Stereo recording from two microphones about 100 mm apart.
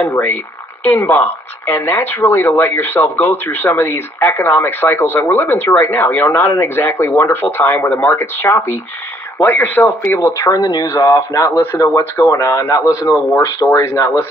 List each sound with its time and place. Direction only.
0.0 s speech: 20° left (ahead or behind)
10.2 s speech: 30° left (ahead or behind)